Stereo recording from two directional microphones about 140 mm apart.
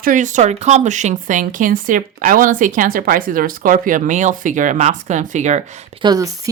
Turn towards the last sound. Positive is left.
turn(degrees=-25)  # may be behind; listen again after turning